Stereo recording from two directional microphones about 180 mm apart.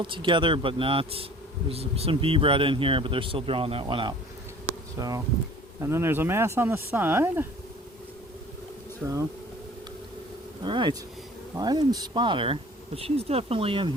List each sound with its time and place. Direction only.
0.0 s a man's voice: 25° right (ahead or behind); by 7.4 s 10° right (ahead or behind)
9.0 s speech: 15° right (ahead or behind)
10.6 s a man's voice: 25° right (ahead or behind)